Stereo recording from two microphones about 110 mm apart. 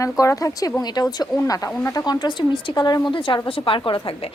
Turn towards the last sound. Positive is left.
turn(degrees=50)  # may be behind; listen again after turning